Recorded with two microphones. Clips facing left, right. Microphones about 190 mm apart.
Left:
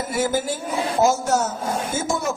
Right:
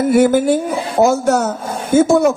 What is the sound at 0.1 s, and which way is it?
Speech, 60° right (ahead or behind).